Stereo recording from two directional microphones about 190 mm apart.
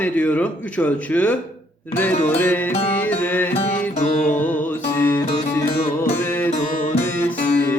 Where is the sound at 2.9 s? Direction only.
10° left (ahead or behind).